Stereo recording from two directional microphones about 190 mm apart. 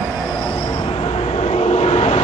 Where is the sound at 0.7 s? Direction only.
30° left (ahead or behind).